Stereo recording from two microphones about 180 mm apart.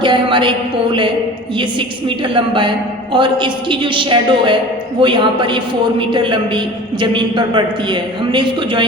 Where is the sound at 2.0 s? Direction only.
30° right (ahead or behind).